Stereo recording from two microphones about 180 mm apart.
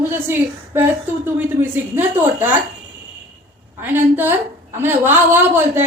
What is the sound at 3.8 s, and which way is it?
A woman's voice, 10° right (ahead or behind).